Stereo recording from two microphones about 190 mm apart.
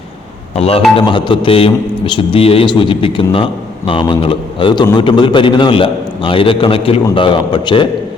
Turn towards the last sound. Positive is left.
turn(degrees=25)  # may be behind; listen again after turning